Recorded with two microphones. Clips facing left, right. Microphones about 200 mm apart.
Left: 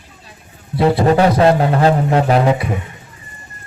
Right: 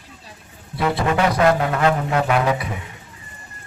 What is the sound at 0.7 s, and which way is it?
Speech, 30° left (ahead or behind).